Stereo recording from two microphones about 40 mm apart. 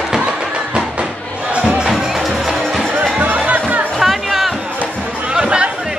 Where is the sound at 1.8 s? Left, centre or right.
Centre.